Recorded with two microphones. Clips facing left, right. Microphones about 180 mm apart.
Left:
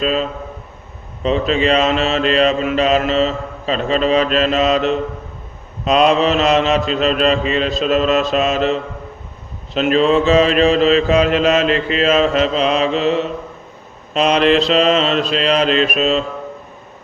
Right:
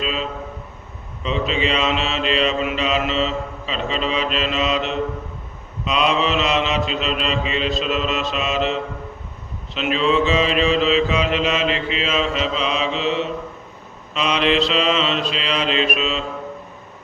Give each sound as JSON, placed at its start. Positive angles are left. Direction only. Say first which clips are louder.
{"t": 0.0, "sound": "mantra", "louder": "left 6 dB", "side_deg": 45}